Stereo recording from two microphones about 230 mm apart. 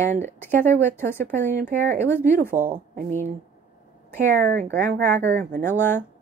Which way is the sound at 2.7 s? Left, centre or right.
Right.